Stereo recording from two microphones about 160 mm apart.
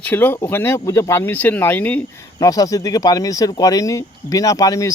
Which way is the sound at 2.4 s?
20° left (ahead or behind).